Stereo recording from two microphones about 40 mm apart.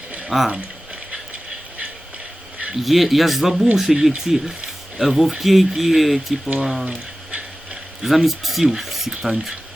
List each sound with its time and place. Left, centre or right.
0.3 s speech: centre
2.8 s speech: centre
7.3 s a sound: right
8.0 s speech: centre